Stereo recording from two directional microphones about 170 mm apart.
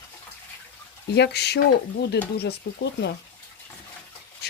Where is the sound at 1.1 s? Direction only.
75° left (ahead or behind).